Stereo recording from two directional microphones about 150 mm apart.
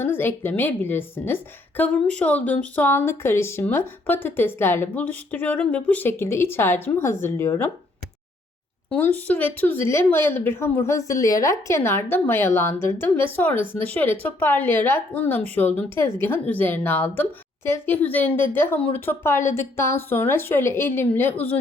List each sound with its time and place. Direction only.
0.0 s a woman's voice: 15° left (ahead or behind)
8.9 s a woman's voice: 10° left (ahead or behind)